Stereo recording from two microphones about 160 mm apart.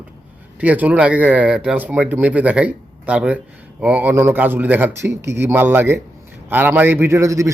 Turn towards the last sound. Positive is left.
turn(degrees=-20)  # may be behind; listen again after turning